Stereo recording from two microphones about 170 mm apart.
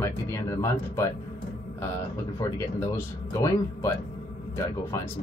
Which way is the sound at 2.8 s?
15° left (ahead or behind).